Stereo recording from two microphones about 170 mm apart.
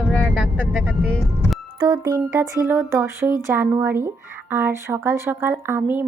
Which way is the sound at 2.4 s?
15° right (ahead or behind).